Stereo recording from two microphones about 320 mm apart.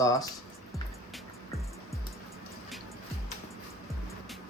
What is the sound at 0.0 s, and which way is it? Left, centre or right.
Speech, centre.